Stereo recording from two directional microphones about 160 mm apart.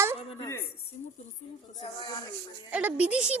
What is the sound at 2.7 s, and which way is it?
Speech, 10° right (ahead or behind).